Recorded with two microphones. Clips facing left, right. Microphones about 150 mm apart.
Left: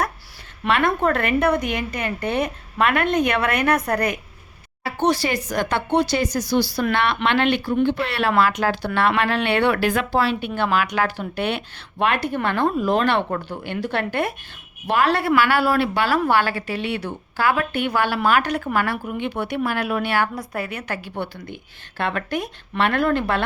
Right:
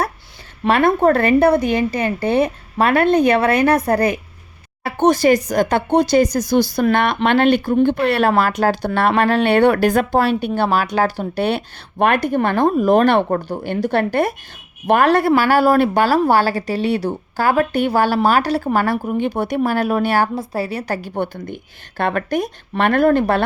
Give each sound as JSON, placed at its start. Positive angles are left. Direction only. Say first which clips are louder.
{"t": 0.6, "sound": "a woman's voice", "louder": "right 6 dB", "side_deg": -35}
{"t": 4.8, "sound": "a woman's voice", "louder": "right 6 dB", "side_deg": -50}
{"t": 20.3, "sound": "a woman's voice", "louder": "right 6 dB", "side_deg": -30}